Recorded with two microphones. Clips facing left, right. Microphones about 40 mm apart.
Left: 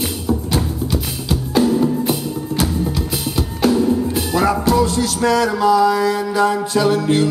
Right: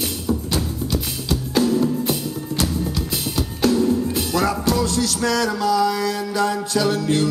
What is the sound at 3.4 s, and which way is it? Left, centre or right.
Music, centre.